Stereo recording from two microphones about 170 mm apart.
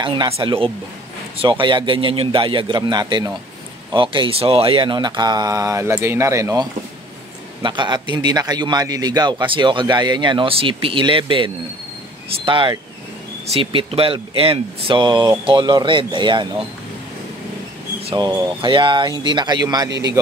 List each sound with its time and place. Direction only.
0.0 s a man's voice: 30° right (ahead or behind)
18.0 s a man's voice: 25° right (ahead or behind)